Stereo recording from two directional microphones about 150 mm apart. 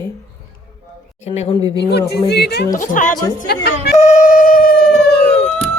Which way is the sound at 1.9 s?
90° left.